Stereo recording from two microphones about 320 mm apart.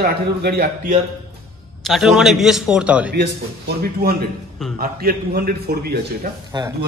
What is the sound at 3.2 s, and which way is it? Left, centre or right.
A man's voice, right.